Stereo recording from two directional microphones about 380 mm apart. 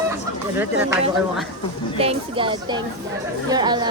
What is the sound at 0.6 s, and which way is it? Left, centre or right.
Speech, centre.